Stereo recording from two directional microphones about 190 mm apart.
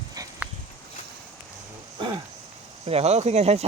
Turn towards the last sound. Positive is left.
turn(degrees=-35)  # may be behind; listen again after turning